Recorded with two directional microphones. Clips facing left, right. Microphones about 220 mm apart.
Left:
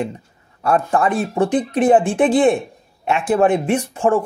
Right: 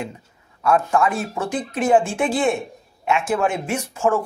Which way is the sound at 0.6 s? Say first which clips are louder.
Left 1 dB; 35° left (ahead or behind).